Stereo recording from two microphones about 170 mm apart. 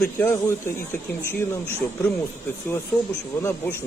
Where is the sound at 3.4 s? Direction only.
10° left (ahead or behind).